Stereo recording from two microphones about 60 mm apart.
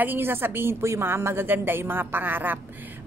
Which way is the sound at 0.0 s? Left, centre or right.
Right.